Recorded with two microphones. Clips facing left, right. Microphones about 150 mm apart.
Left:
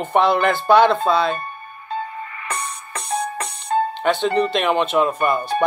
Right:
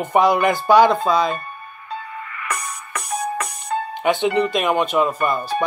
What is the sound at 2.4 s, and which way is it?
Music, 30° left (ahead or behind).